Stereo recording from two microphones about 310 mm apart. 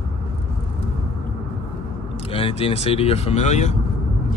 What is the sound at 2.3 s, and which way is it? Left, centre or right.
Speech, centre.